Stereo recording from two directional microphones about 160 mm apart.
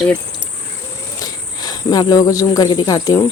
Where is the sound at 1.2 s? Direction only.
25° left (ahead or behind).